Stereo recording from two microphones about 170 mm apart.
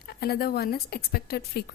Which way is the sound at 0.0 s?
65° left (ahead or behind).